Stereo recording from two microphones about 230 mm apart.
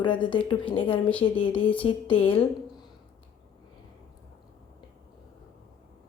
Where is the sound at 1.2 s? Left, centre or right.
Left.